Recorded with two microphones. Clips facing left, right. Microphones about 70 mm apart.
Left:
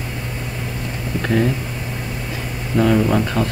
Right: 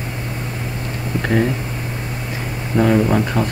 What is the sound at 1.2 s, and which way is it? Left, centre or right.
Speech, right.